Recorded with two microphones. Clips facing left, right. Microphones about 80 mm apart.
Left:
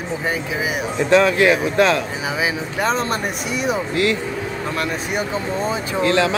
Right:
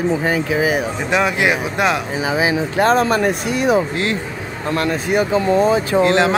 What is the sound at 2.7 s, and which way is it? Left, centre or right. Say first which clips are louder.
Speech: right 6 dB; right.